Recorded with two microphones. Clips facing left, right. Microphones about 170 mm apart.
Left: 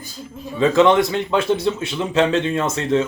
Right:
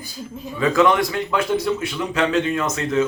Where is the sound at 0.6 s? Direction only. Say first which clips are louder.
Left 3 dB; 25° left (ahead or behind).